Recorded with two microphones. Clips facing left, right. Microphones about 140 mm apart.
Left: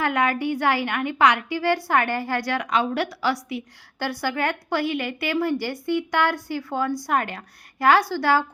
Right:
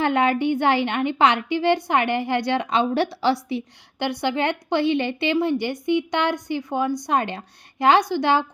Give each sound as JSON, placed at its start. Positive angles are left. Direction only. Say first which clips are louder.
{"t": 0.0, "sound": "a woman's voice", "louder": "right 3 dB", "side_deg": -25}